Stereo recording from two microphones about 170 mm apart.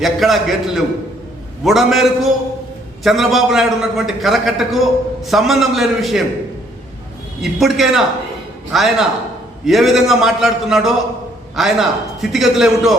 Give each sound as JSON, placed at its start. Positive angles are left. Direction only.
{"t": 0.0, "sound": "a man's voice", "side_deg": 0}
{"t": 7.6, "sound": "a man's voice", "side_deg": 0}